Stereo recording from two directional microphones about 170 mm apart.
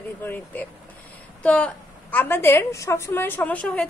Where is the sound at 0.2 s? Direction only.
10° left (ahead or behind).